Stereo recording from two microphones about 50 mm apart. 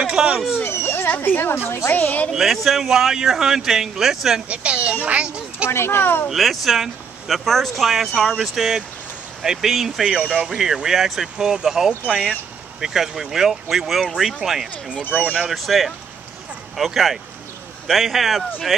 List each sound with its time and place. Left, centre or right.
0.0 s a sound: centre
0.7 s children playing: left
1.1 s a woman's voice: left
2.3 s speech: centre
4.5 s speech: right
5.7 s speech: left
6.2 s speech: centre